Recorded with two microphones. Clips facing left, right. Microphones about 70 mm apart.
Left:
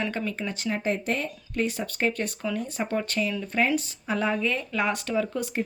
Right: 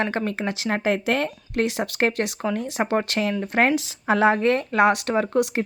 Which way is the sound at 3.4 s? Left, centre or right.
Right.